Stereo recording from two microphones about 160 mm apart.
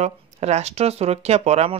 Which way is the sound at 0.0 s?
45° right (ahead or behind).